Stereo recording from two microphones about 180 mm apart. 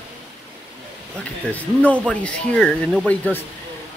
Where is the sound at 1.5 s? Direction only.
5° left (ahead or behind).